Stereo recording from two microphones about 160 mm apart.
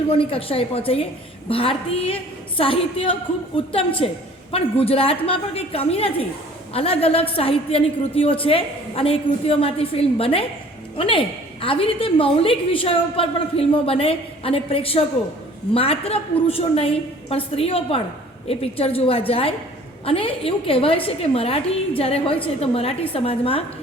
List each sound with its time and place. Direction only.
0.1 s a woman's voice: 35° left (ahead or behind)